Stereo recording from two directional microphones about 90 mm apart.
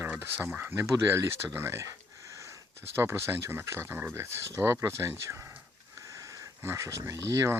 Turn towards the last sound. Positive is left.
turn(degrees=-30)  # may be behind; listen again after turning